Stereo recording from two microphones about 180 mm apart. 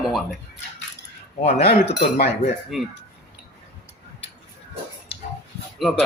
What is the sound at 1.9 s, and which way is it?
Cutlery, 65° left (ahead or behind).